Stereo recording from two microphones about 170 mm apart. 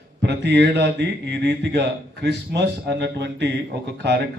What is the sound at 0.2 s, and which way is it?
A man's voice, 85° right.